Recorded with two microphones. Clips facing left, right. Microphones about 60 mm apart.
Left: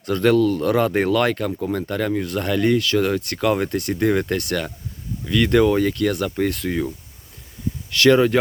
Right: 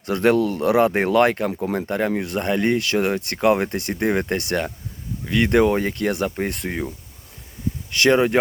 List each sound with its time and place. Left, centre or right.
0.0 s speech: right
6.6 s speech: centre
7.9 s speech: right